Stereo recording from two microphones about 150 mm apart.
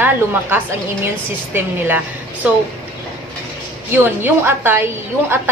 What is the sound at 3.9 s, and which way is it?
A woman's voice, 15° right (ahead or behind).